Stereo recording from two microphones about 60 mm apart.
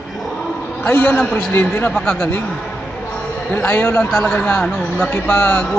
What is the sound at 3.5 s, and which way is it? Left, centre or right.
Speech, left.